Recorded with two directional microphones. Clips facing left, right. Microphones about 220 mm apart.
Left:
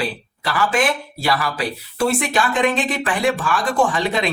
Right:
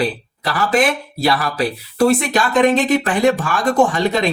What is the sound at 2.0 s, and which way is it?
Speech, 40° right (ahead or behind).